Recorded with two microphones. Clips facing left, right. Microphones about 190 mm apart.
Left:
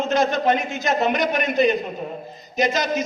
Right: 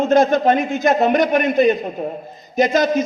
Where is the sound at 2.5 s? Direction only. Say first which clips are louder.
Right 6 dB; 50° right (ahead or behind).